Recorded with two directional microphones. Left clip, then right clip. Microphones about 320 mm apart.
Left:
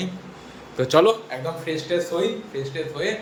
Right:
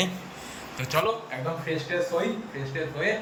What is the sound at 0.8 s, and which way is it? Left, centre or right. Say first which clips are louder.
Speech: left 11 dB; centre.